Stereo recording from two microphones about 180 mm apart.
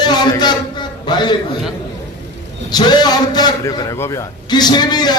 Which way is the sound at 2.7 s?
25° left (ahead or behind).